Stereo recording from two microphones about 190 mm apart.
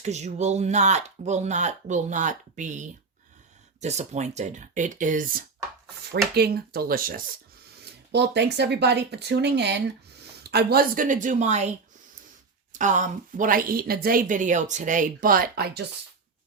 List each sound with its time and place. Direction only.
0.0 s speech: 35° right (ahead or behind)
6.3 s a woman's voice: 55° right (ahead or behind)
7.9 s a woman's voice: 60° right (ahead or behind); by 11.7 s 35° right (ahead or behind)
12.7 s a woman's voice: 40° right (ahead or behind)